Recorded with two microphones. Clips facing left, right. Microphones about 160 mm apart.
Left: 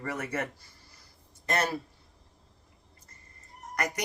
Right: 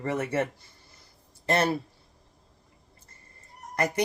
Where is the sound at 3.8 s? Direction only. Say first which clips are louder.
Right 6 dB; 30° right (ahead or behind).